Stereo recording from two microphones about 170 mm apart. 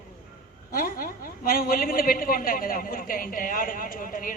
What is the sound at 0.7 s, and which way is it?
A man's voice, 55° left (ahead or behind).